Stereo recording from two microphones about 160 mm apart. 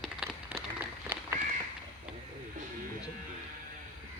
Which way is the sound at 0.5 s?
15° right (ahead or behind).